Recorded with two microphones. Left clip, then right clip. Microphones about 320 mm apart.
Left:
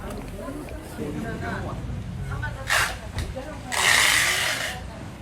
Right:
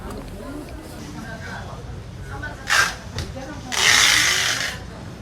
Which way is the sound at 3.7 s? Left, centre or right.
Left.